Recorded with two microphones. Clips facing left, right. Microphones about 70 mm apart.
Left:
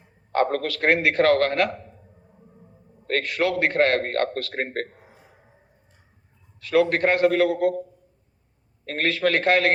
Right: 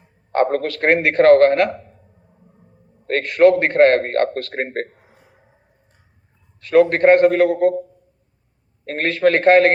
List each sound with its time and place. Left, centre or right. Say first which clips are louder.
0.3 s a man's voice: right 4 dB; right
3.1 s a man's voice: right 10 dB; right
6.6 s a man's voice: right 6 dB; right
8.9 s a man's voice: right 6 dB; right